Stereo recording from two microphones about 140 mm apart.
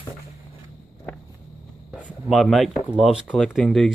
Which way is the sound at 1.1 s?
15° left (ahead or behind).